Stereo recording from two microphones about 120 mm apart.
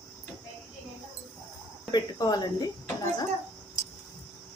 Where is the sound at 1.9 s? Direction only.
35° left (ahead or behind).